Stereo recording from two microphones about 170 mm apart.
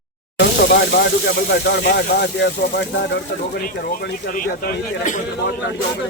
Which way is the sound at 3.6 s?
55° left (ahead or behind).